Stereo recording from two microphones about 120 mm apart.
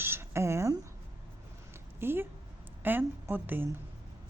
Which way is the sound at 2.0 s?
20° right (ahead or behind).